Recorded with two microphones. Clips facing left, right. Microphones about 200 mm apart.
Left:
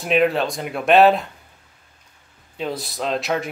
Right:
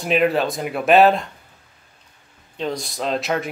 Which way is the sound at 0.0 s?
Centre (ahead or behind).